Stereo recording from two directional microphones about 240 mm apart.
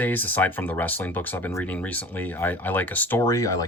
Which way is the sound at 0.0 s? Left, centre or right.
Centre.